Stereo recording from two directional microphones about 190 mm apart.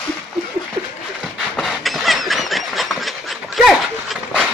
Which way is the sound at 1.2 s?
Centre (ahead or behind).